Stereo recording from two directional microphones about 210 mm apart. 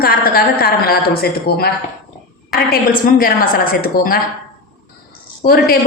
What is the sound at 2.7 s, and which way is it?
Speech, 45° left (ahead or behind).